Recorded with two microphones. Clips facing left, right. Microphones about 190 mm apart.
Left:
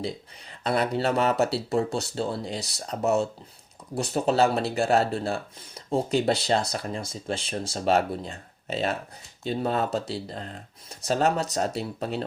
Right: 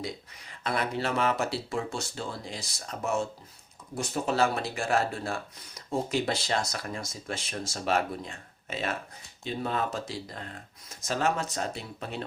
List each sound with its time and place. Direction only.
0.6 s speech: 35° left (ahead or behind)